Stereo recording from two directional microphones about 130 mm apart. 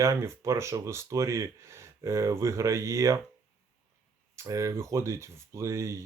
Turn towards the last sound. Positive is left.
turn(degrees=-25)  # may be behind; listen again after turning